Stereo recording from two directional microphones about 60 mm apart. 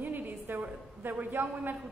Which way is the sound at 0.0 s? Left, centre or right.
Right.